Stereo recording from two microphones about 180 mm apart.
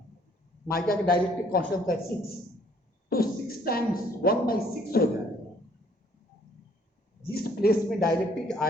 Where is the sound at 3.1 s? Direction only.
55° left (ahead or behind).